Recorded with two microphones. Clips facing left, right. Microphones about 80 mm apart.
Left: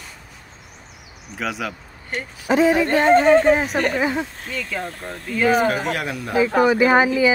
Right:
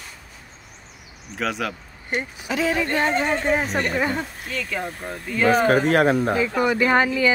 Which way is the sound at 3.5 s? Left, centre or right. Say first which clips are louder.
Left 4 dB; centre.